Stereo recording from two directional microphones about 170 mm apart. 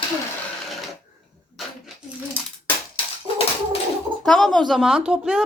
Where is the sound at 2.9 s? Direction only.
35° left (ahead or behind).